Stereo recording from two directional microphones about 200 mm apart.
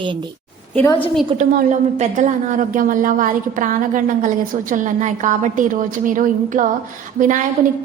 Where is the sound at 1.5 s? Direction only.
40° right (ahead or behind).